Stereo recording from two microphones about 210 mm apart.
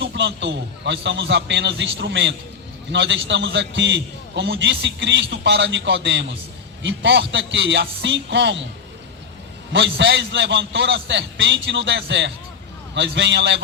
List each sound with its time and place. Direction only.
0.0 s a man's voice: 60° right (ahead or behind)
9.7 s a man's voice: 60° right (ahead or behind)